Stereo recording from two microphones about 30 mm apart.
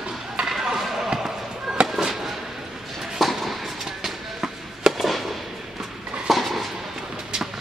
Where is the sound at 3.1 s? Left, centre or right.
Centre.